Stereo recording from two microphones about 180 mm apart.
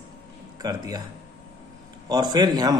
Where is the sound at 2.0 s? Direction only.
20° right (ahead or behind).